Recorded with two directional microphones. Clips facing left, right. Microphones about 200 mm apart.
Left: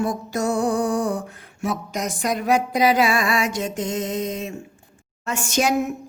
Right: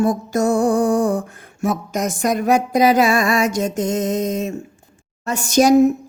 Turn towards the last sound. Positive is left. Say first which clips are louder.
# right 9 dB
turn(degrees=-40)  # may be behind; listen again after turning